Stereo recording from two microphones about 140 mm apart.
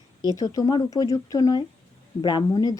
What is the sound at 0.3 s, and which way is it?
Speech, 25° left (ahead or behind).